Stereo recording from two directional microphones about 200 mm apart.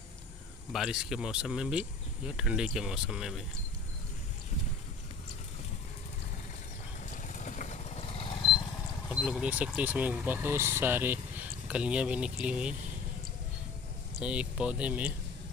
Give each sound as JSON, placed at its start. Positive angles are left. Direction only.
{"t": 0.7, "sound": "speech", "side_deg": -5}
{"t": 7.1, "sound": "vehicle", "side_deg": 40}
{"t": 9.1, "sound": "speech", "side_deg": -5}
{"t": 14.2, "sound": "speech", "side_deg": -5}